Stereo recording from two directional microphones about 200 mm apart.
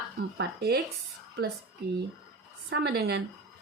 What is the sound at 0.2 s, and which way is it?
Speech, 50° right (ahead or behind).